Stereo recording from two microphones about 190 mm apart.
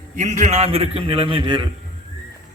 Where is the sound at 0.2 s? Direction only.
40° right (ahead or behind).